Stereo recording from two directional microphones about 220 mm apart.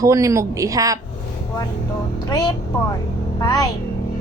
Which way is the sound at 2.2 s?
15° left (ahead or behind).